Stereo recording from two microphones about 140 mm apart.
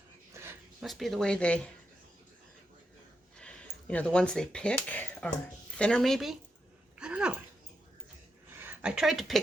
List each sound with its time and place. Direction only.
0.4 s a sound: 20° right (ahead or behind)
0.8 s speech: centre (ahead or behind)
3.3 s a sound: 10° left (ahead or behind)
4.7 s speech: 10° left (ahead or behind)
7.0 s dog: 10° right (ahead or behind)
8.5 s speech: 15° right (ahead or behind)